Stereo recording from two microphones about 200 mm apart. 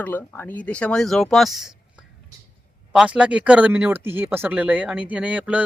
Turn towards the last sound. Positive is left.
turn(degrees=-5)  # may be behind; listen again after turning